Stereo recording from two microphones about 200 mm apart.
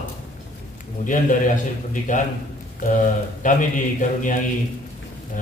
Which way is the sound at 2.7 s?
40° left (ahead or behind).